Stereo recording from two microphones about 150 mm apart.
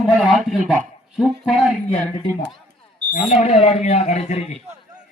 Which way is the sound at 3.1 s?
45° left (ahead or behind).